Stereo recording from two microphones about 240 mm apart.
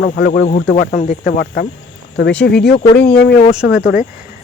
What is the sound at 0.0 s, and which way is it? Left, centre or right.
Speech, left.